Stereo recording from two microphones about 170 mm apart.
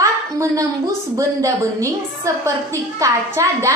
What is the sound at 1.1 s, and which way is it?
A woman's voice, 20° right (ahead or behind).